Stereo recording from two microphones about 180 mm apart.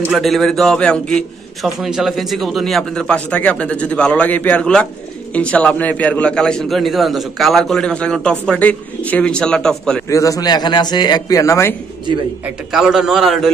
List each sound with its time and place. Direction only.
0.1 s a man's voice: centre (ahead or behind)
10.0 s a man's voice: 15° left (ahead or behind)
12.7 s a man's voice: centre (ahead or behind)